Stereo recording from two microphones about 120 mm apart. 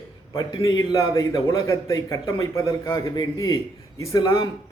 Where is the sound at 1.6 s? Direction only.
25° left (ahead or behind).